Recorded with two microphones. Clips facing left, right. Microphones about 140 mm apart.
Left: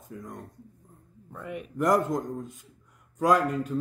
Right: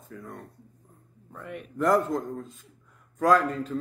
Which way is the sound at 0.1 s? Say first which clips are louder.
Left 1 dB; 15° left (ahead or behind).